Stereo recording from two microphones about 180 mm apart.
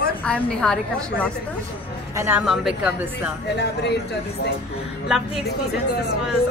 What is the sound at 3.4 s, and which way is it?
Speech, 70° left (ahead or behind).